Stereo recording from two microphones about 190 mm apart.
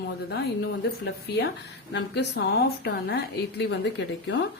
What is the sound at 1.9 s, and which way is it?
A woman's voice, 65° left (ahead or behind).